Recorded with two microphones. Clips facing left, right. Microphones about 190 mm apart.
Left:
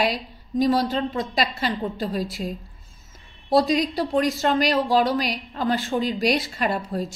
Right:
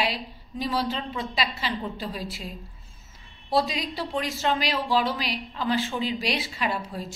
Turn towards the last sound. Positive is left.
turn(degrees=45)  # may be behind; listen again after turning